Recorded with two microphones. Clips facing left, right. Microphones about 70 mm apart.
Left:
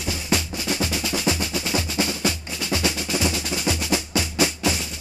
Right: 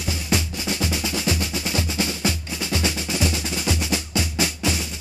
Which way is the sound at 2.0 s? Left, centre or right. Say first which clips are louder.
Left 2 dB; centre.